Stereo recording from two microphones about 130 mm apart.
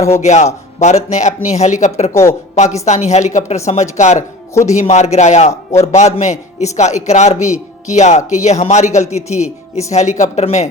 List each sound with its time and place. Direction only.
0.2 s speech: 60° left (ahead or behind)